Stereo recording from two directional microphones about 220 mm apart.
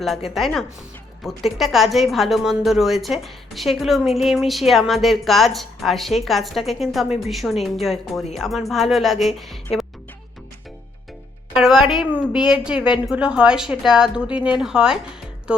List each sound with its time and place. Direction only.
0.0 s a woman's voice: centre (ahead or behind)
11.5 s a woman's voice: centre (ahead or behind)